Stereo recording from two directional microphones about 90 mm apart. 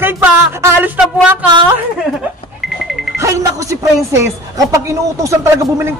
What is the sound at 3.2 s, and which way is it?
A woman's voice, 35° right (ahead or behind).